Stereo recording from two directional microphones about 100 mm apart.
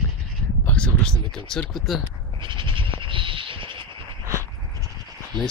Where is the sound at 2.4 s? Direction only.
55° right (ahead or behind).